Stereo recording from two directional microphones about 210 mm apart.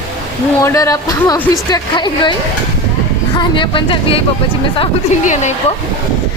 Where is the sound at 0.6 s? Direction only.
15° left (ahead or behind).